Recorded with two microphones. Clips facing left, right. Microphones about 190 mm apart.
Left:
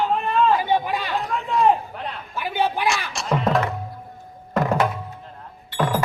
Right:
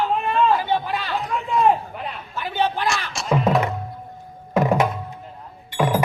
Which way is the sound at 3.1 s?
5° right (ahead or behind).